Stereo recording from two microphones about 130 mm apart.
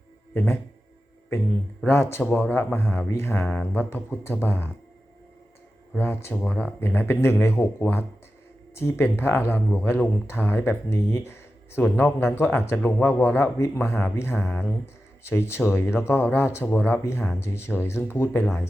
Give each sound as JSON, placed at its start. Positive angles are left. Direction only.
{"t": 0.3, "sound": "speech", "side_deg": 20}
{"t": 1.8, "sound": "speech", "side_deg": 15}
{"t": 6.0, "sound": "speech", "side_deg": 15}